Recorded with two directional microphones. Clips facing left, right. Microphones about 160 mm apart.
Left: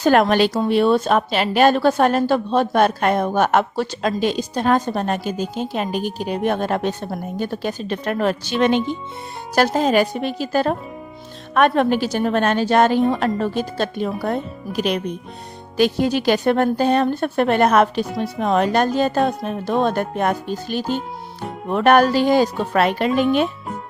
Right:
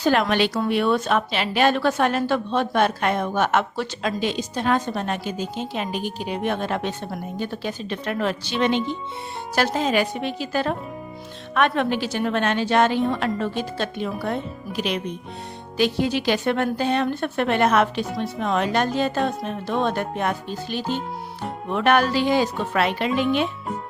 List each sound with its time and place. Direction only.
0.0 s a woman's voice: 45° left (ahead or behind)